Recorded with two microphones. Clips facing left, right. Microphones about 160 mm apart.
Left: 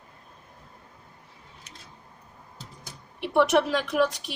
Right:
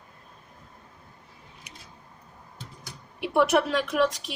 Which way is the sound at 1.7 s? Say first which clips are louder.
Right 1 dB; 10° right (ahead or behind).